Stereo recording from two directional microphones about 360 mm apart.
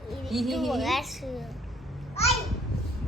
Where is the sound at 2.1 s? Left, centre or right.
Centre.